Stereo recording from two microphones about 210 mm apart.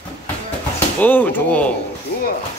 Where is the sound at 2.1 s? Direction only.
55° left (ahead or behind).